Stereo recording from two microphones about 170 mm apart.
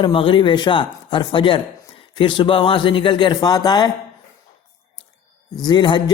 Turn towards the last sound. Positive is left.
turn(degrees=25)  # may be behind; listen again after turning